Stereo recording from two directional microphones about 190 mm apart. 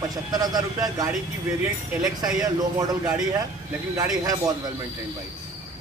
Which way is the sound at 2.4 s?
20° right (ahead or behind).